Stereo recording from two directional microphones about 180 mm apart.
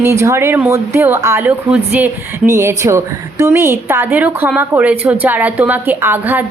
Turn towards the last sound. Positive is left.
turn(degrees=-10)  # may be behind; listen again after turning